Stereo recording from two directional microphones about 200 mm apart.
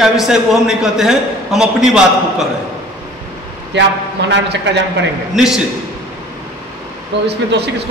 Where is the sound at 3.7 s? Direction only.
60° right (ahead or behind).